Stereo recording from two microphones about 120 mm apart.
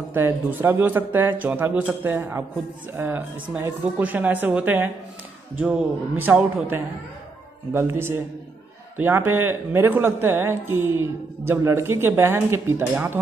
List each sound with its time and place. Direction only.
0.1 s speech: 15° right (ahead or behind)